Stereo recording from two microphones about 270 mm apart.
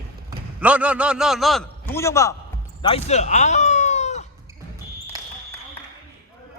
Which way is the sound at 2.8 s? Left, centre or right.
Left.